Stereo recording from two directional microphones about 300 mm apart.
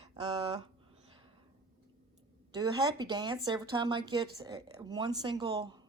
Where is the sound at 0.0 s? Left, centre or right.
Centre.